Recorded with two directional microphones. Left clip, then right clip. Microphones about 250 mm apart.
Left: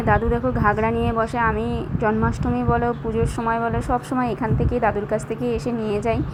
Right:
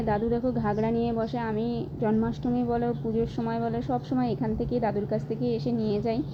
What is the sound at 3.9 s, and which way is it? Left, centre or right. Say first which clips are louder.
A woman's voice: left 6 dB; left.